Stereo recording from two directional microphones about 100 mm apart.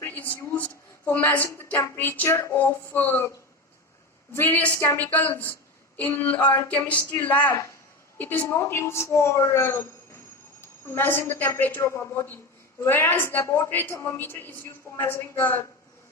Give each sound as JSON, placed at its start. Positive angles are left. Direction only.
{"t": 0.0, "sound": "a sound", "side_deg": 15}
{"t": 1.5, "sound": "a woman's voice", "side_deg": 20}
{"t": 4.4, "sound": "a woman's voice", "side_deg": 20}
{"t": 10.8, "sound": "a woman's voice", "side_deg": 20}